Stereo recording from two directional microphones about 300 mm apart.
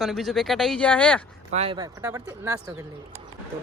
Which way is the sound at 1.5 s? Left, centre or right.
Centre.